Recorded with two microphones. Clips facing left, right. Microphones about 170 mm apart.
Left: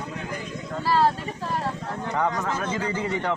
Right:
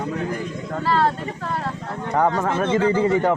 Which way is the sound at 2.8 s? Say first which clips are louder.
Right 10 dB; 35° right (ahead or behind).